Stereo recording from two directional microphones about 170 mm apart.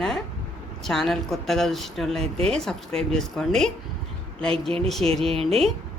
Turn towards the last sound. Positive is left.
turn(degrees=-35)  # may be behind; listen again after turning